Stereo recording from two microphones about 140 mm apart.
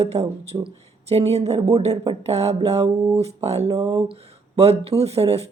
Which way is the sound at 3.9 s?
40° right (ahead or behind).